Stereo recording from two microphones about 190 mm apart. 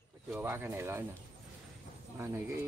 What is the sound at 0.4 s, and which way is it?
Speech, 10° right (ahead or behind).